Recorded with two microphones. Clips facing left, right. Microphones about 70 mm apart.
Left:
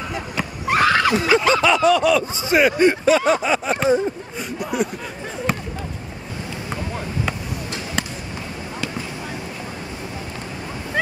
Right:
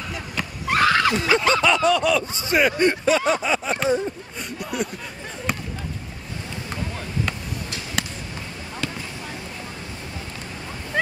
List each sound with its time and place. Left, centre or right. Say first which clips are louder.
0.7 s neigh: left 2 dB; left
1.2 s snicker: left 3 dB; left
1.5 s speech: left 3 dB; centre
3.8 s a sound: left 4 dB; centre
6.7 s basketball bounce: left 3 dB; centre
8.0 s basketball bounce: left 1 dB; centre